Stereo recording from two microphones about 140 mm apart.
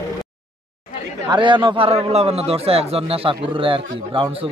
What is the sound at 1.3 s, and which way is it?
A man's voice, 35° right (ahead or behind).